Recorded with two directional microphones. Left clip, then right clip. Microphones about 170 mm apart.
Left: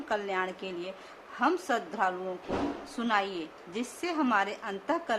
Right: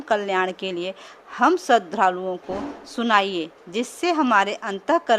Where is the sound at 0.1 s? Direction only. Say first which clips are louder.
Right 10 dB; 50° right (ahead or behind).